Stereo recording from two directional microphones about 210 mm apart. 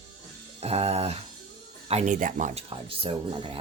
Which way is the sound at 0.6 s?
30° right (ahead or behind).